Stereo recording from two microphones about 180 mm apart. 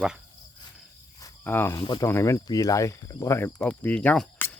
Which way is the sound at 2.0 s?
15° left (ahead or behind).